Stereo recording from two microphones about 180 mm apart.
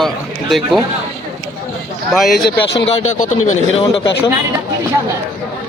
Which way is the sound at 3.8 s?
30° left (ahead or behind).